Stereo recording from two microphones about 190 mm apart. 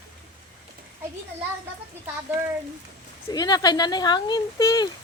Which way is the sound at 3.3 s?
20° left (ahead or behind).